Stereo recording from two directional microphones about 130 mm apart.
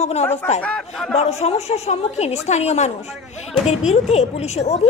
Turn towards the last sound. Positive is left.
turn(degrees=55)  # may be behind; listen again after turning